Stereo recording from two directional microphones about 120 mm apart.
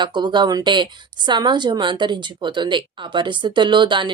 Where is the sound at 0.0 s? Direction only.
40° right (ahead or behind).